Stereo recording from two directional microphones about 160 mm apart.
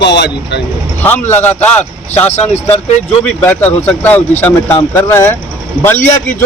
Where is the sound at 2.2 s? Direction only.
40° left (ahead or behind).